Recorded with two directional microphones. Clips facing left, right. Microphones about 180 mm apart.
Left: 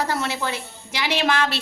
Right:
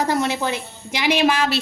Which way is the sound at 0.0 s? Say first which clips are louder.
Right 4 dB; 15° right (ahead or behind).